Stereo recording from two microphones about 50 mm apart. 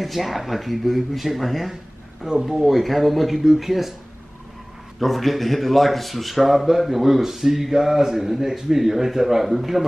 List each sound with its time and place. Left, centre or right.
0.0 s a man's voice: centre
2.2 s speech: centre
2.5 s a man's voice: centre
5.0 s a man's voice: centre